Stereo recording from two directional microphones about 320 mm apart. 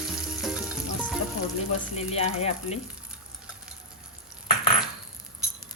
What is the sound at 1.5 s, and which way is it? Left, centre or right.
Speech, centre.